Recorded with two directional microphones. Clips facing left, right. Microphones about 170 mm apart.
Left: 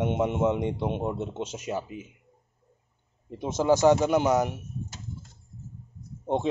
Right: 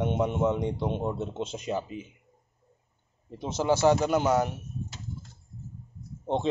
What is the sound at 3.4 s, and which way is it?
A man's voice, 15° left (ahead or behind).